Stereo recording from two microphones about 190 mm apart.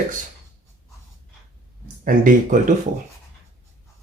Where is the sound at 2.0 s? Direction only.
45° right (ahead or behind).